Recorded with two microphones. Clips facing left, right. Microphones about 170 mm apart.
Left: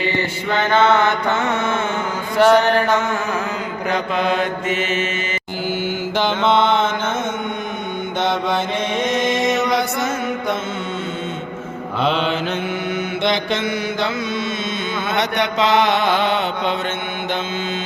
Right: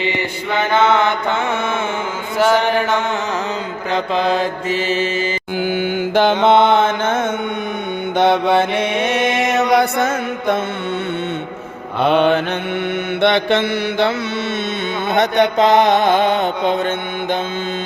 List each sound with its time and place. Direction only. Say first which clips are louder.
0.0 s mantra: even; 15° right (ahead or behind)
2.4 s mantra: left 2 dB; centre (ahead or behind)
3.9 s mantra: right 3 dB; 30° right (ahead or behind)
5.6 s mantra: right 3 dB; 55° right (ahead or behind)
9.7 s mantra: right 5 dB; 55° right (ahead or behind)
12.0 s mantra: right 6 dB; 55° right (ahead or behind)
15.1 s music: right 6 dB; 55° right (ahead or behind)